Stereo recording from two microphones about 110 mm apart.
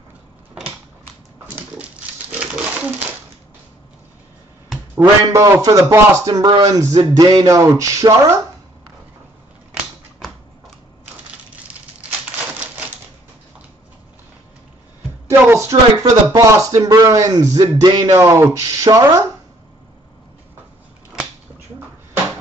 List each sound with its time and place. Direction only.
1.5 s dog: 15° right (ahead or behind)
5.0 s speech: 30° right (ahead or behind)
15.2 s speech: 25° right (ahead or behind)